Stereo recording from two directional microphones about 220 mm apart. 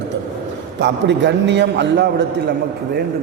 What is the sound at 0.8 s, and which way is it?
A man's voice, 55° right (ahead or behind).